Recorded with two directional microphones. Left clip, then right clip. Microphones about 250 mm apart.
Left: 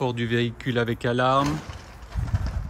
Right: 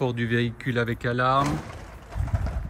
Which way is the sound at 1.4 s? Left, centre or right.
Right.